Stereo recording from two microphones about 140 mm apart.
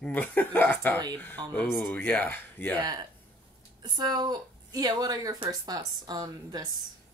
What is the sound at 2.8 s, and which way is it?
A woman's voice, 30° right (ahead or behind).